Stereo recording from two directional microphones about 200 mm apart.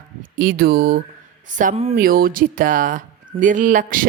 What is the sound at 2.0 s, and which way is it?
Speech, 45° right (ahead or behind).